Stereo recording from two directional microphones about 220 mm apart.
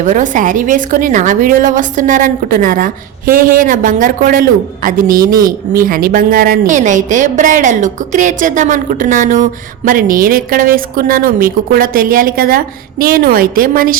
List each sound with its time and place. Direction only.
0.0 s a woman's voice: 35° right (ahead or behind)